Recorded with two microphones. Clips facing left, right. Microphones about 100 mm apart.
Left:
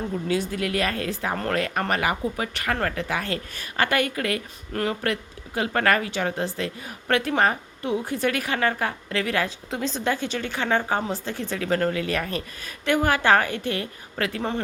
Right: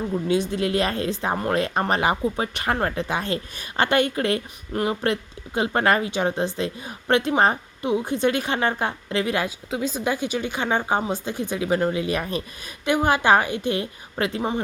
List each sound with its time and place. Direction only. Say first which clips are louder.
0.3 s speech: right 3 dB; 20° right (ahead or behind)
9.6 s a woman's voice: right 1 dB; 5° right (ahead or behind)